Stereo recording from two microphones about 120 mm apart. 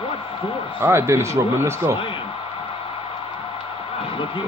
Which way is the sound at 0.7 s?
20° right (ahead or behind).